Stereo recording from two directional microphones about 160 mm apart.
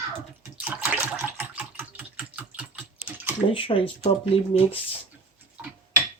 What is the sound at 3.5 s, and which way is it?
Speech, 35° left (ahead or behind).